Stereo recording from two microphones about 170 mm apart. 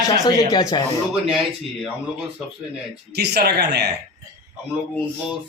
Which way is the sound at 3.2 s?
75° right (ahead or behind).